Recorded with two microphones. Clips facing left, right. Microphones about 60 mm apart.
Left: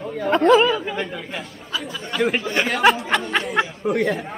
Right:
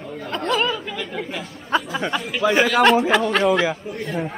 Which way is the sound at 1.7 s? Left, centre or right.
Right.